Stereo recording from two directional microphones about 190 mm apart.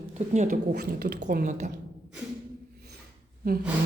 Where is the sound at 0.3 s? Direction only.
45° right (ahead or behind).